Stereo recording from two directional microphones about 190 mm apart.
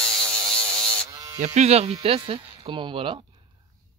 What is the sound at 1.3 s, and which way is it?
Speech, 40° right (ahead or behind).